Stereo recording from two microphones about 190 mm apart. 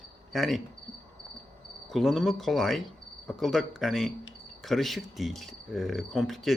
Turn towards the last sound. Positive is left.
turn(degrees=0)  # may be behind; listen again after turning